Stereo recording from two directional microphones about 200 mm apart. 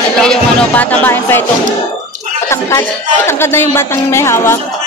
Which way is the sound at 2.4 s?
15° left (ahead or behind).